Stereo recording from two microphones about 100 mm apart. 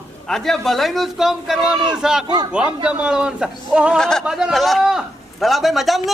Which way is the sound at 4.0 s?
5° left (ahead or behind).